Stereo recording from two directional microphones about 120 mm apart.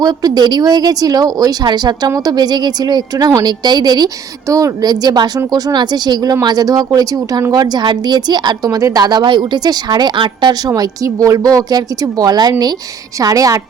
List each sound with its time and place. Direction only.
0.0 s a woman's voice: 35° right (ahead or behind)